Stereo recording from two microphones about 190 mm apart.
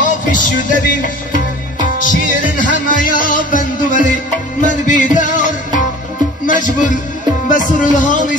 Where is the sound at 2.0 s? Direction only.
45° left (ahead or behind).